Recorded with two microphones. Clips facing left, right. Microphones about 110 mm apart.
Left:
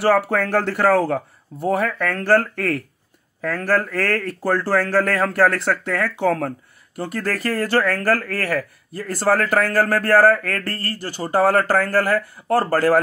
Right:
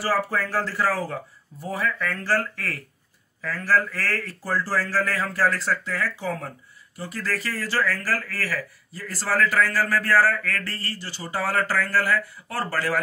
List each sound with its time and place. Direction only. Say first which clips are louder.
0.3 s speech: left 6 dB; 65° left (ahead or behind); by 13.0 s 50° left (ahead or behind)